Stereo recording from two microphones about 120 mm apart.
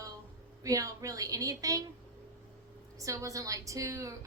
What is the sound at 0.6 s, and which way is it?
A woman's voice, 30° right (ahead or behind).